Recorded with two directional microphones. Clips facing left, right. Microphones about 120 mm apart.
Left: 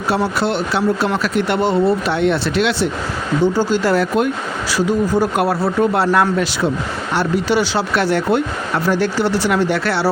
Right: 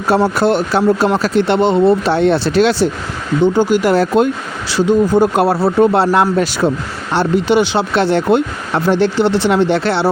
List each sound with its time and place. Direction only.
0.3 s speech: 45° right (ahead or behind)
3.4 s speech: 20° right (ahead or behind)
3.9 s speech: 30° right (ahead or behind)